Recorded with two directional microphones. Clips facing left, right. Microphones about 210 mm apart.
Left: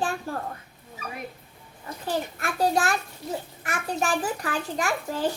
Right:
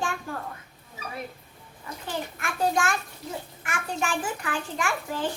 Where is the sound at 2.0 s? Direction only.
35° left (ahead or behind).